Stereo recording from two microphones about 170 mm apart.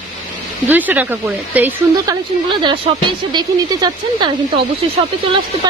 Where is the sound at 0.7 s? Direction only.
10° right (ahead or behind).